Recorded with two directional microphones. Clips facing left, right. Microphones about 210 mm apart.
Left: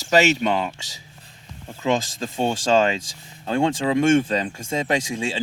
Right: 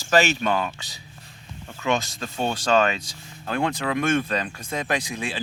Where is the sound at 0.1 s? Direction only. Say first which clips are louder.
Left 2 dB; 20° left (ahead or behind).